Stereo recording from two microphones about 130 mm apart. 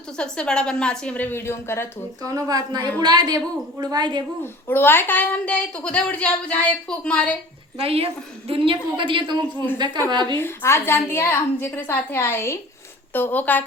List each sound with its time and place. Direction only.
0.2 s speech: 5° left (ahead or behind)
2.2 s a woman's voice: 25° right (ahead or behind)
4.7 s speech: 15° left (ahead or behind)
7.8 s a woman's voice: 50° right (ahead or behind)
10.3 s a woman's voice: 20° left (ahead or behind)